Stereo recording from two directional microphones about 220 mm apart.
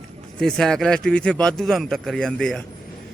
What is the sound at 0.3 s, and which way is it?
A man's voice, 5° left (ahead or behind).